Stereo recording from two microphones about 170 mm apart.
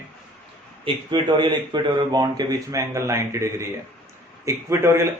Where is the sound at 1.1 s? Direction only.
25° right (ahead or behind).